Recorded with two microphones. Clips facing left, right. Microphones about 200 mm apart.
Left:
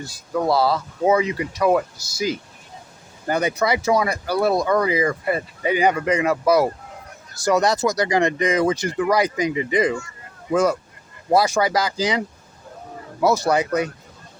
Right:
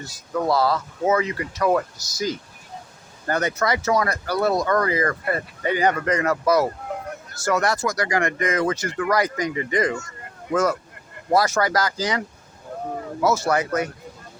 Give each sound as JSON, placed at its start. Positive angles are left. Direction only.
{"t": 0.0, "sound": "speech", "side_deg": 10}
{"t": 13.2, "sound": "speech", "side_deg": 35}
{"t": 13.5, "sound": "speech", "side_deg": 15}